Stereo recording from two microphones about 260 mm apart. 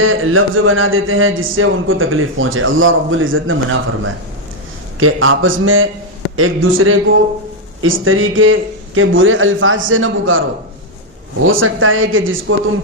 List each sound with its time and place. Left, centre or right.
0.0 s speech: right
11.4 s speech: right